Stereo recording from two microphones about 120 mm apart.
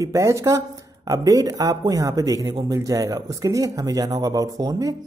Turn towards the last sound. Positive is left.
turn(degrees=-30)  # may be behind; listen again after turning